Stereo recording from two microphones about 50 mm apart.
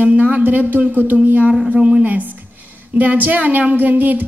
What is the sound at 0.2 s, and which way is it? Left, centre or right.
Speech, right.